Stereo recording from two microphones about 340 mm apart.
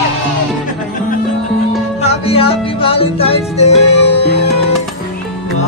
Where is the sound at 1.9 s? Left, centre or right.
Centre.